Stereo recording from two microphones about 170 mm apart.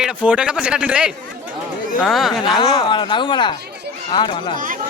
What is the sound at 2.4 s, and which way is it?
Speech, 25° left (ahead or behind).